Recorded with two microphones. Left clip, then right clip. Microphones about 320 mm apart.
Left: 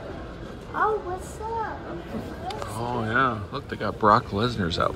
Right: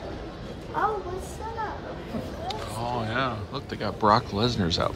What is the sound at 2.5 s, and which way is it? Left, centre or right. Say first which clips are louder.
Speech: left 1 dB; centre.